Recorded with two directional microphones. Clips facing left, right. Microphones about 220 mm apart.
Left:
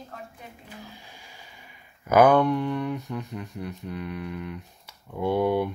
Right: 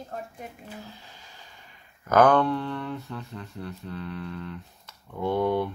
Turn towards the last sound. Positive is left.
turn(degrees=10)  # may be behind; listen again after turning